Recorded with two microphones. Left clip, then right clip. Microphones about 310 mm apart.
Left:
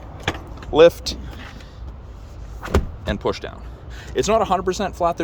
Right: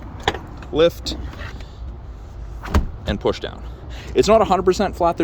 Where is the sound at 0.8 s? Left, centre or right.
Centre.